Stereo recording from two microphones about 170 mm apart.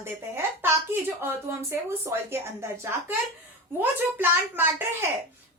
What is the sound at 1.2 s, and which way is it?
A woman's voice, 15° right (ahead or behind).